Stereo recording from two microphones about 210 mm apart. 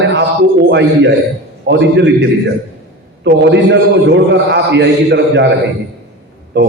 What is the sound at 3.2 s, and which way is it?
A man's voice, 55° right (ahead or behind).